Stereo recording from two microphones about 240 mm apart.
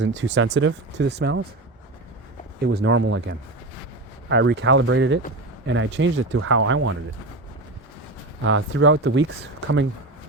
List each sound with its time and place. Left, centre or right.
0.0 s speech: right
2.6 s speech: right
8.4 s speech: right